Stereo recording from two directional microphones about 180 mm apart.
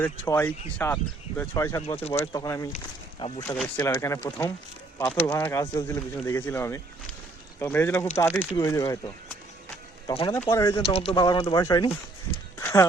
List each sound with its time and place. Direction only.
0.0 s speech: 10° left (ahead or behind)
2.0 s speech: 35° left (ahead or behind)
2.2 s speech: 15° left (ahead or behind)
10.1 s speech: 25° left (ahead or behind)
10.3 s speech: 15° left (ahead or behind)
10.8 s speech: 35° left (ahead or behind)
12.5 s horse: 15° left (ahead or behind)